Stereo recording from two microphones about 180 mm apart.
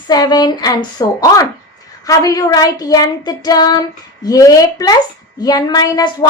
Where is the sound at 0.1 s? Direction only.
20° left (ahead or behind).